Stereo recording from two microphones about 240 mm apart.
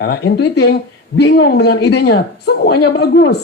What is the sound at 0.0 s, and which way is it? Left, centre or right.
Speech, left.